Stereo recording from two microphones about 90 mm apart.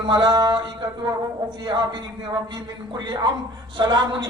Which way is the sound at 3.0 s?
55° right (ahead or behind).